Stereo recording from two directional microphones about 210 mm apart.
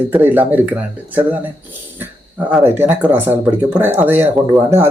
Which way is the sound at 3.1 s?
10° right (ahead or behind).